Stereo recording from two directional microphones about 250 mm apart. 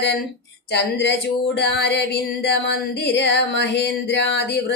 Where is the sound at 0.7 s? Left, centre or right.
Left.